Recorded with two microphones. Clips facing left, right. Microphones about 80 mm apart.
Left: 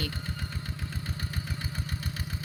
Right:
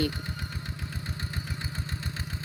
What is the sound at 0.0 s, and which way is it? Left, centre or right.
Engine, right.